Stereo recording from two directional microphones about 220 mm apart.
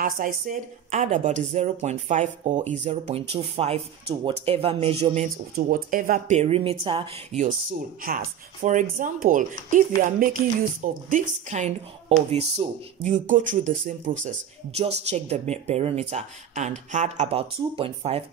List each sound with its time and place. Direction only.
0.0 s a woman's voice: 35° right (ahead or behind)
5.7 s a woman's voice: 40° right (ahead or behind); by 7.4 s 25° right (ahead or behind)
8.0 s a woman's voice: 40° right (ahead or behind)